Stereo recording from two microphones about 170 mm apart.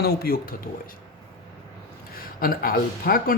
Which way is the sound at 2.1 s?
60° left (ahead or behind).